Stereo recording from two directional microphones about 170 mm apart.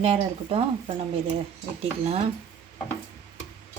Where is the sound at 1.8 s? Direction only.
40° right (ahead or behind).